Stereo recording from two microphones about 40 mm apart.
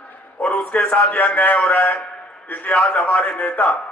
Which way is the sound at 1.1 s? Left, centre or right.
Left.